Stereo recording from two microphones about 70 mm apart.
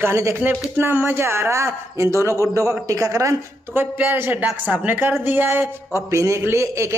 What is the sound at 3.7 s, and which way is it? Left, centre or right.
A woman's voice, right.